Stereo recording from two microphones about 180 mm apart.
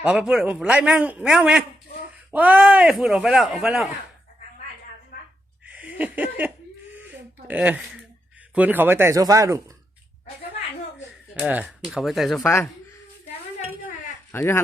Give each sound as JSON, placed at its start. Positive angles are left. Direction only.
{"t": 0.0, "sound": "a man's voice", "side_deg": -5}
{"t": 5.1, "sound": "a sound", "side_deg": 55}
{"t": 5.6, "sound": "a sound", "side_deg": -5}
{"t": 7.4, "sound": "speech", "side_deg": -10}
{"t": 11.3, "sound": "a man's voice", "side_deg": -5}
{"t": 14.3, "sound": "speech", "side_deg": 15}